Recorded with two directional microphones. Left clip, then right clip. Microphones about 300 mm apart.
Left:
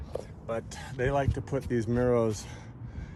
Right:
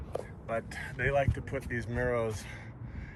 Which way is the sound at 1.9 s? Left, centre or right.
Left.